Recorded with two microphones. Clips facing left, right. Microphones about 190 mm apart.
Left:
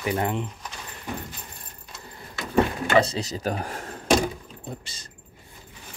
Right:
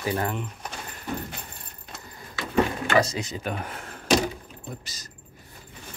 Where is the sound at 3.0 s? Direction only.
35° left (ahead or behind).